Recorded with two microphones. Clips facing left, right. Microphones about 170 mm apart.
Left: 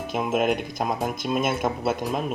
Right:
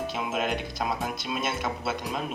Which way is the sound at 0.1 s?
50° left (ahead or behind).